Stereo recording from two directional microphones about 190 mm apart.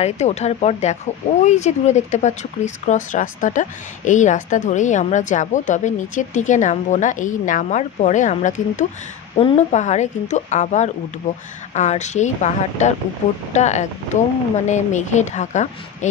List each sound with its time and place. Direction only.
0.0 s speech: 35° left (ahead or behind)